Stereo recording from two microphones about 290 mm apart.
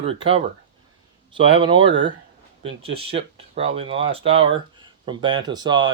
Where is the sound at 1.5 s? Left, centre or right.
Centre.